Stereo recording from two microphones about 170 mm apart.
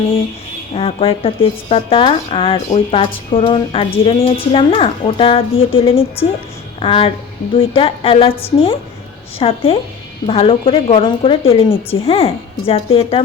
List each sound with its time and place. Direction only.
0.7 s a woman's voice: 35° left (ahead or behind)